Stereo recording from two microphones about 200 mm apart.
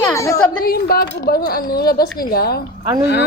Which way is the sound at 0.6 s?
50° left (ahead or behind).